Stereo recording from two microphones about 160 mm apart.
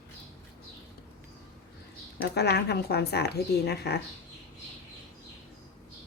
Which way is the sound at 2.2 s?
90° left.